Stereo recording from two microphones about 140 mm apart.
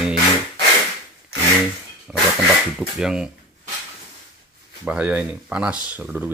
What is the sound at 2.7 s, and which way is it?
Speech, 5° right (ahead or behind).